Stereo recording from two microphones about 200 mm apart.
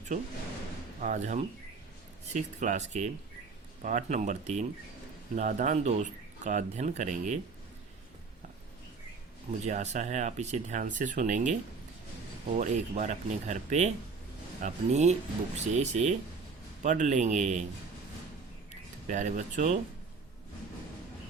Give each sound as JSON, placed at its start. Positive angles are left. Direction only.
{"t": 0.1, "sound": "speech", "side_deg": -40}
{"t": 9.5, "sound": "speech", "side_deg": -35}
{"t": 12.5, "sound": "speech", "side_deg": -40}
{"t": 18.7, "sound": "speech", "side_deg": -40}